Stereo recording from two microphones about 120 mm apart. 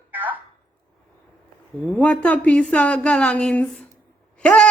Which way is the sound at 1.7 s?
15° right (ahead or behind).